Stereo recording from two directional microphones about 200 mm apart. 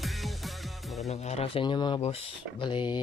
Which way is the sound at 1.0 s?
30° left (ahead or behind).